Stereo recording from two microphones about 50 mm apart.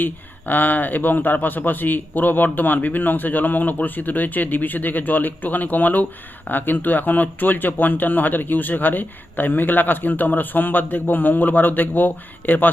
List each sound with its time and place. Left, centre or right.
0.0 s speech: left